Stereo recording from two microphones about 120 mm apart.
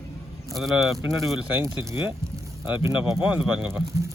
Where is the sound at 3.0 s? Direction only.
10° right (ahead or behind).